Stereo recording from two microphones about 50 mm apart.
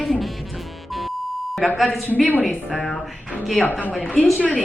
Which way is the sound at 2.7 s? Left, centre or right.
Centre.